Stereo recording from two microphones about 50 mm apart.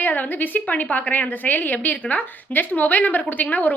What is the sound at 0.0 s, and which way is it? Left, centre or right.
A woman's voice, left.